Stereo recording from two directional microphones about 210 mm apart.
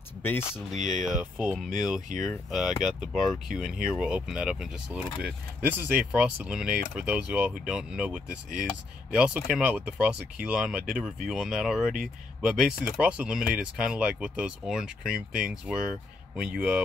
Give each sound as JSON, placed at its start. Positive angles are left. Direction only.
{"t": 0.2, "sound": "speech", "side_deg": 10}
{"t": 0.7, "sound": "speech", "side_deg": -35}
{"t": 1.1, "sound": "speech", "side_deg": -5}